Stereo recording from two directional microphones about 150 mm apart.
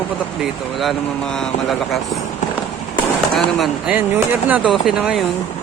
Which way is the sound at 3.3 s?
Centre (ahead or behind).